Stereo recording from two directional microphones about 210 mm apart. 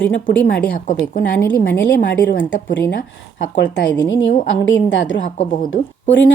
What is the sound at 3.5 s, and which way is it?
A woman's voice, 60° left (ahead or behind).